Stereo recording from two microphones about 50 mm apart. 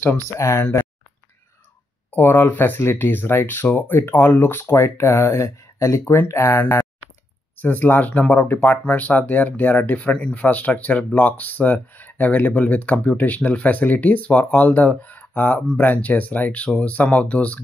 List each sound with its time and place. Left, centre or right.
0.4 s speech: left
2.1 s speech: left
2.8 s speech: left
4.9 s speech: left